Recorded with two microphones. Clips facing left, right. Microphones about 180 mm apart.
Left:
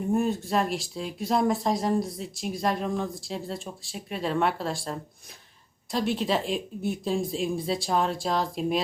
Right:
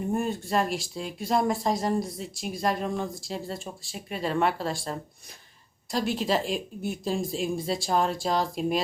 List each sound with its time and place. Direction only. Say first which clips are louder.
0.0 s speech: left 3 dB; centre (ahead or behind)